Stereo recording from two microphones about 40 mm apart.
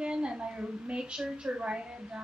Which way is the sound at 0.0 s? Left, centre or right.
Right.